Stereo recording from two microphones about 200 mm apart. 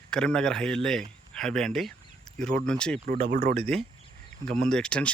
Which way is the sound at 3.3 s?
50° right (ahead or behind).